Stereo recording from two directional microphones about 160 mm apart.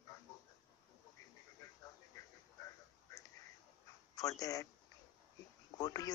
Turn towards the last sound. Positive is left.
turn(degrees=25)  # may be behind; listen again after turning